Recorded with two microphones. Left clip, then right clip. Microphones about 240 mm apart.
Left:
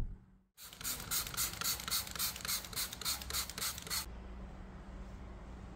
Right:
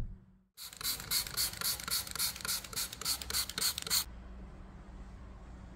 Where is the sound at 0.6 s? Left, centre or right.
Right.